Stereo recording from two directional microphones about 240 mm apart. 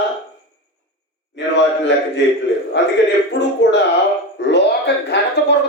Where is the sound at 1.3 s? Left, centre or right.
Left.